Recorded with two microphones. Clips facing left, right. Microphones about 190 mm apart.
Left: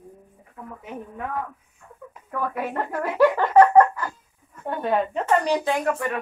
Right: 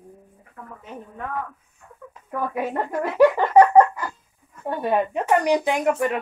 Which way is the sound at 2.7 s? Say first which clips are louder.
Right 2 dB; 15° right (ahead or behind).